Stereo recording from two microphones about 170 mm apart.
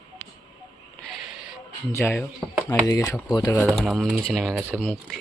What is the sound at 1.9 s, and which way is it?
Speech, 15° left (ahead or behind).